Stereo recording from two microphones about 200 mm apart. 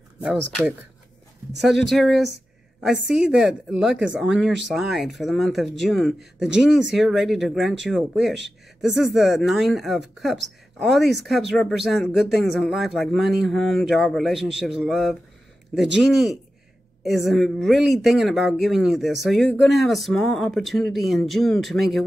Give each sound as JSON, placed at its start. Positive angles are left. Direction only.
{"t": 1.6, "sound": "speech", "side_deg": 0}